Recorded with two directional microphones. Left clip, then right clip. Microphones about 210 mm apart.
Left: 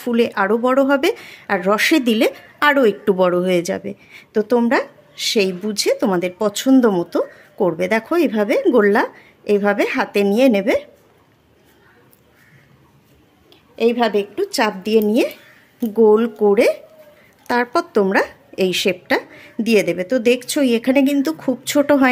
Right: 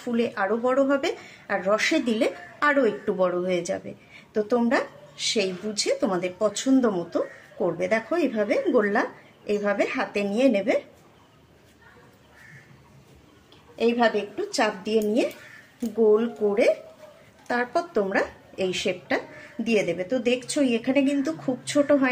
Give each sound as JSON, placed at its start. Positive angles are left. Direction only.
{"t": 0.0, "sound": "speech", "side_deg": 55}
{"t": 13.7, "sound": "a woman's voice", "side_deg": 55}